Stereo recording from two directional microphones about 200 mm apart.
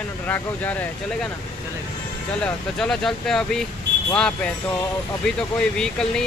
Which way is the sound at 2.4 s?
5° left (ahead or behind).